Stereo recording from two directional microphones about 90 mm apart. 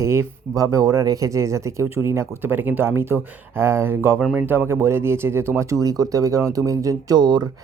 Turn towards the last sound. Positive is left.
turn(degrees=-55)  # may be behind; listen again after turning